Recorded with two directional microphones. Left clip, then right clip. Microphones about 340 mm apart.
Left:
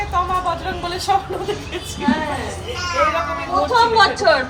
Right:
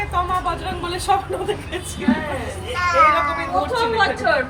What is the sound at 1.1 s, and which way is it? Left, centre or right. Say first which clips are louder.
Speech: left 1 dB; centre.